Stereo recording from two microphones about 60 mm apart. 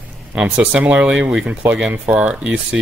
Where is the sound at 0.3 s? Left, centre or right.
Centre.